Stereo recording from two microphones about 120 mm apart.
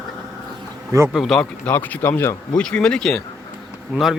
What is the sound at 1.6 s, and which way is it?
Speech, 15° left (ahead or behind).